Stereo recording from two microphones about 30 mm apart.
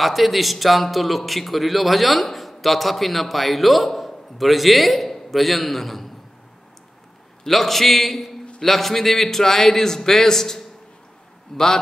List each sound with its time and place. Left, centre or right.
0.0 s a man's voice: centre
7.4 s a man's voice: centre